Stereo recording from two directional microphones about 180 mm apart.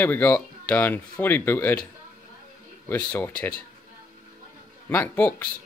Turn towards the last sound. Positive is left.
turn(degrees=10)  # may be behind; listen again after turning